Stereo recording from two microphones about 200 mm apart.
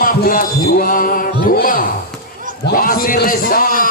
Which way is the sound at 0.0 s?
45° left (ahead or behind).